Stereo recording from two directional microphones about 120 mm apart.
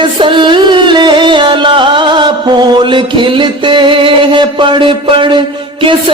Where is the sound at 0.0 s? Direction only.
40° right (ahead or behind).